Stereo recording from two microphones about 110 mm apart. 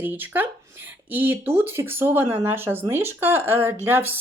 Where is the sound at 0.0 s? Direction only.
15° right (ahead or behind).